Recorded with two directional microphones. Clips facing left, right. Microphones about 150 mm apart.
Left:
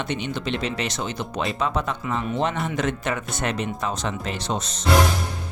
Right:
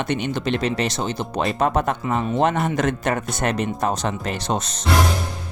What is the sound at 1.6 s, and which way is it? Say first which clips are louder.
Speech: right 5 dB; 50° right (ahead or behind).